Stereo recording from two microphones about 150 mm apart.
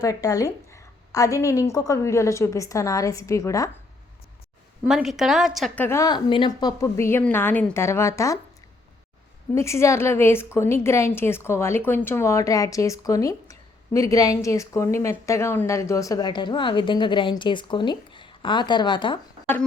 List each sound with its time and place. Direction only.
0.0 s a woman's voice: 25° left (ahead or behind)
4.9 s a woman's voice: centre (ahead or behind)
5.7 s a woman's voice: 15° left (ahead or behind)
9.6 s a woman's voice: 20° left (ahead or behind)